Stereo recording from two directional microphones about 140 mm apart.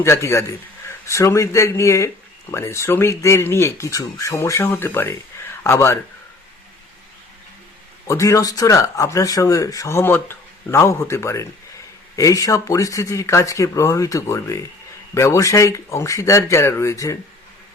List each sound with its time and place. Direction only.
0.0 s speech: 20° left (ahead or behind)
8.0 s speech: 20° left (ahead or behind)